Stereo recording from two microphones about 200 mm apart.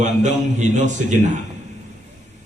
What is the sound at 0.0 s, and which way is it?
A man's voice, 35° right (ahead or behind).